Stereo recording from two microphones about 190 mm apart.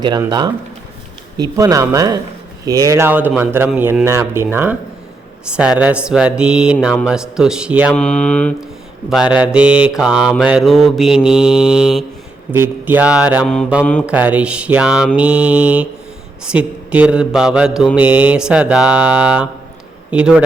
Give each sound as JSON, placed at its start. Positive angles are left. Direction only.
{"t": 0.0, "sound": "speech", "side_deg": -20}
{"t": 5.5, "sound": "mantra", "side_deg": -5}
{"t": 7.9, "sound": "mantra", "side_deg": 5}
{"t": 9.3, "sound": "mantra", "side_deg": -5}
{"t": 12.5, "sound": "speech", "side_deg": -10}
{"t": 16.4, "sound": "mantra", "side_deg": -5}
{"t": 20.1, "sound": "a man's voice", "side_deg": -5}